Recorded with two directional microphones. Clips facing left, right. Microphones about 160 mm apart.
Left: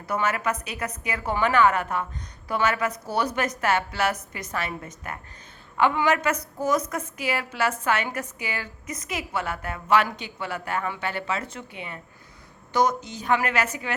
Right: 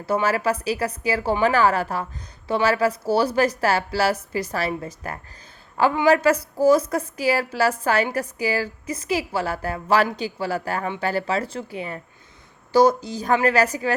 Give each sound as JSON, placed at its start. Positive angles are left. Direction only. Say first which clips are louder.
{"t": 0.0, "sound": "a woman's voice", "louder": "right 5 dB", "side_deg": -30}